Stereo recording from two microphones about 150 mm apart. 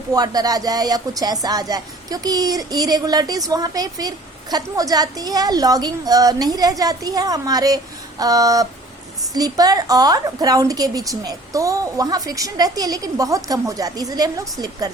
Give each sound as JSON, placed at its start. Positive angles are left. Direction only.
{"t": 0.1, "sound": "a woman's voice", "side_deg": -25}